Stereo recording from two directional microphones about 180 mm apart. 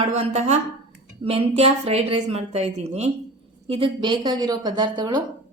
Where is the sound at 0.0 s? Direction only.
40° right (ahead or behind).